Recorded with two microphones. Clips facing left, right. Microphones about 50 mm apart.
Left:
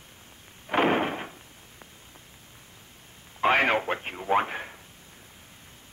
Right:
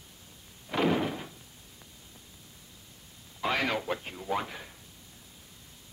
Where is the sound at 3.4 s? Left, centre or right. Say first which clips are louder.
Left 7 dB; left.